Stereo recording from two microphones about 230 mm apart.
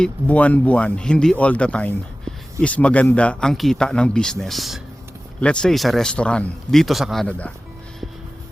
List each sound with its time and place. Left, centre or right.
0.0 s speech: centre